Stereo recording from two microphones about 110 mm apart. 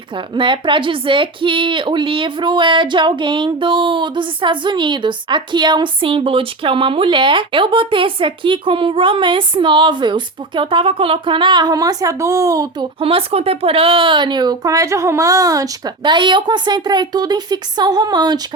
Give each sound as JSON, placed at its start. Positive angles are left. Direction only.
{"t": 0.3, "sound": "speech", "side_deg": -50}
{"t": 12.8, "sound": "speech", "side_deg": -55}